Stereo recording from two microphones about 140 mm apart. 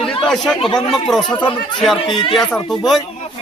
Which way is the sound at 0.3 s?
5° left (ahead or behind).